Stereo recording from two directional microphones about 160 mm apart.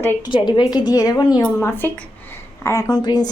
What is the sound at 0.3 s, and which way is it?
A woman's voice, 30° left (ahead or behind).